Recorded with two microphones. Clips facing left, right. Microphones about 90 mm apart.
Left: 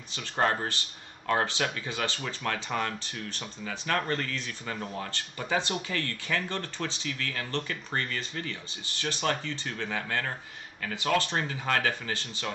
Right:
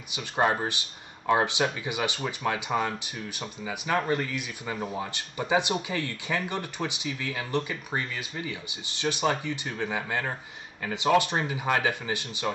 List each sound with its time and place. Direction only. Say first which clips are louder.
0.1 s speech: right 2 dB; 15° right (ahead or behind)